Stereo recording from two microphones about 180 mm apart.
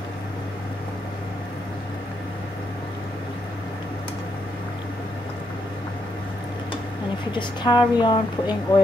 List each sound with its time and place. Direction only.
7.3 s a woman's voice: 25° left (ahead or behind)